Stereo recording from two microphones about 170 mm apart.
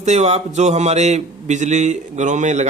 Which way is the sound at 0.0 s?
40° right (ahead or behind).